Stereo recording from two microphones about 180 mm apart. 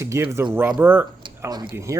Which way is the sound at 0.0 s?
15° right (ahead or behind).